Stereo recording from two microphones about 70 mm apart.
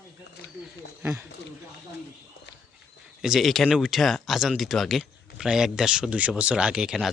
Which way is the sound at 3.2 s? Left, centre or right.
Centre.